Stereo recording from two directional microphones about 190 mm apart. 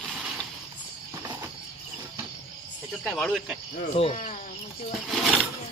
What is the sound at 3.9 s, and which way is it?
Speech, 35° left (ahead or behind).